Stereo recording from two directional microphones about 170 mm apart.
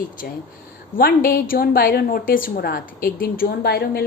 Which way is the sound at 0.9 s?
60° left (ahead or behind).